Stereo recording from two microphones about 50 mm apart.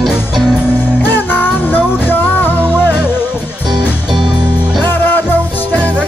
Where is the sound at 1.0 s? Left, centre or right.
Left.